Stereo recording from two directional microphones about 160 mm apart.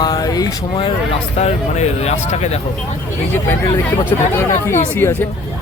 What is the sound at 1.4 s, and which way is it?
Speech, 40° left (ahead or behind).